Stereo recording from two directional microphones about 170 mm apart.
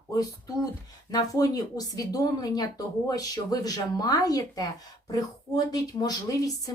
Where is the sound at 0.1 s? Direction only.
20° left (ahead or behind).